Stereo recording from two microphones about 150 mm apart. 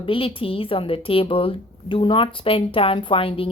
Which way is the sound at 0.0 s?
35° left (ahead or behind).